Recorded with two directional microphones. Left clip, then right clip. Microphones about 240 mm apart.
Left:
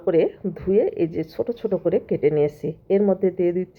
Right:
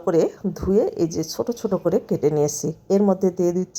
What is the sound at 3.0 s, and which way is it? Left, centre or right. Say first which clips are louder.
Speech: even; centre.